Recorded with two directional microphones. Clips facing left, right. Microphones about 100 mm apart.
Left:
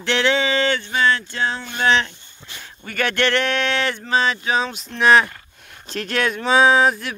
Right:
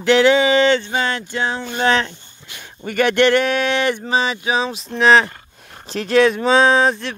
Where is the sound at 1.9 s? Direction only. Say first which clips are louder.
Right 1 dB; 40° right (ahead or behind).